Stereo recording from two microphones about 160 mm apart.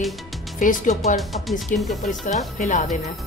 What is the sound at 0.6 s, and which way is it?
A woman's voice, 55° left (ahead or behind).